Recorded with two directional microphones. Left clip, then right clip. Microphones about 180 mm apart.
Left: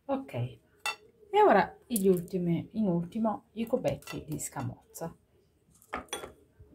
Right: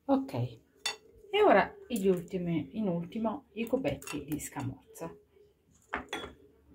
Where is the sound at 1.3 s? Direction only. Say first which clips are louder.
Left 1 dB; 5° left (ahead or behind).